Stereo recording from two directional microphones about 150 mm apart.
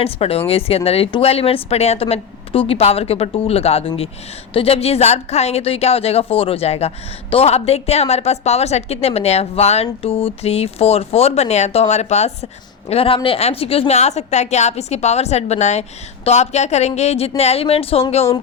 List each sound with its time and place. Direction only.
0.0 s a woman's voice: 40° left (ahead or behind)